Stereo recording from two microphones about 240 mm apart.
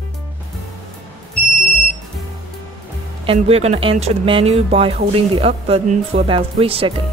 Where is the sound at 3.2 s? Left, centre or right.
Right.